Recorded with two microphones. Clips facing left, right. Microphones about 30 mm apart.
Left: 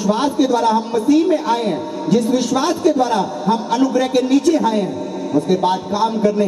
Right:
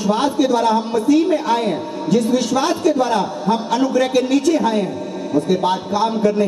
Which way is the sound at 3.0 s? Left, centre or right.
Right.